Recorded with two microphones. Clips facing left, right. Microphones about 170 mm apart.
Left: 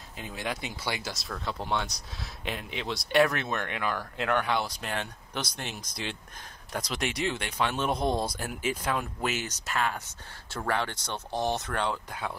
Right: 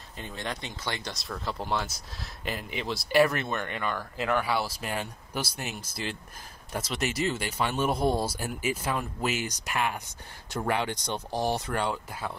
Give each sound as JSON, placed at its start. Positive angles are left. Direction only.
{"t": 0.2, "sound": "speech", "side_deg": 5}